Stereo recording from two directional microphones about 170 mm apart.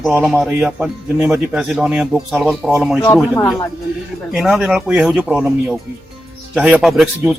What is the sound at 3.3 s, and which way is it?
Speech, 20° left (ahead or behind).